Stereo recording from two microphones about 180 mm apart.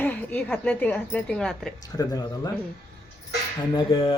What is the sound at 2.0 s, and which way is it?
Speech, 20° left (ahead or behind).